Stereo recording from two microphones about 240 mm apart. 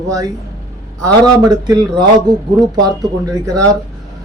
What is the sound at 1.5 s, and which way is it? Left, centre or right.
Speech, centre.